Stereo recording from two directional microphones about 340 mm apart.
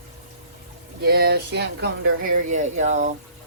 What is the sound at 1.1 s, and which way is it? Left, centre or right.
Speech, right.